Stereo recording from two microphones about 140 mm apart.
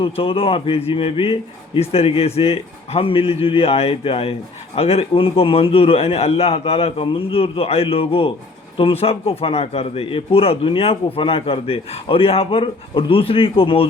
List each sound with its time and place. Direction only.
0.0 s a man's voice: 40° left (ahead or behind)